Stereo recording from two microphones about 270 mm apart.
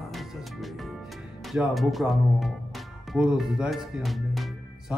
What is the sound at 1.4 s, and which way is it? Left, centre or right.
Speech, centre.